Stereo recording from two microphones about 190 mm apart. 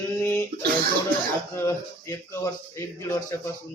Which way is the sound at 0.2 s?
15° left (ahead or behind).